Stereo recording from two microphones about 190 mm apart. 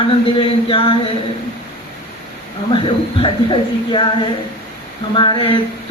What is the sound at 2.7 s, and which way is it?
Speech, 25° left (ahead or behind).